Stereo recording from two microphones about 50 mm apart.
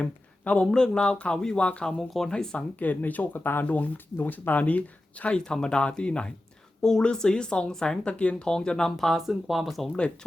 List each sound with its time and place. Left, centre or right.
0.0 s speech: left
2.0 s speech: centre
2.3 s speech: centre
2.7 s speech: left
3.4 s speech: left
3.7 s speech: left
5.2 s speech: left
9.0 s speech: centre